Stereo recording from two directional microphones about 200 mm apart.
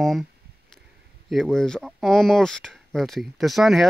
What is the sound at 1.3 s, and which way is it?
Speech, centre (ahead or behind).